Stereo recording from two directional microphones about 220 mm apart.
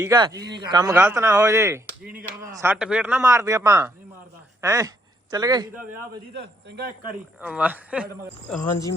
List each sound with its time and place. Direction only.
0.0 s speech: 15° right (ahead or behind)
7.4 s speech: 5° right (ahead or behind)